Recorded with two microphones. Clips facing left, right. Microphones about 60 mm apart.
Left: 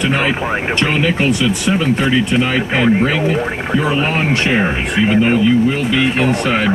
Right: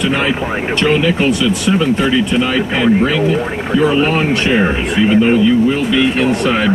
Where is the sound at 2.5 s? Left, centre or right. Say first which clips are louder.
Right 2 dB; centre.